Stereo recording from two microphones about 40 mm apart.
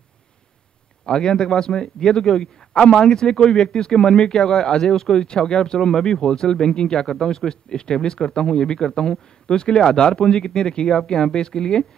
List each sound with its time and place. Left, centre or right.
1.0 s speech: centre